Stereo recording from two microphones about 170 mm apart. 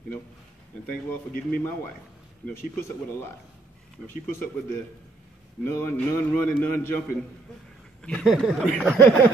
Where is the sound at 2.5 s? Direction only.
15° left (ahead or behind).